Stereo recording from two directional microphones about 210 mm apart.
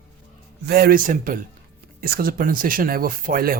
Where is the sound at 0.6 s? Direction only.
50° right (ahead or behind).